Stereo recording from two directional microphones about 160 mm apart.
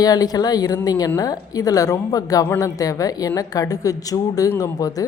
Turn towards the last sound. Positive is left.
turn(degrees=20)  # may be behind; listen again after turning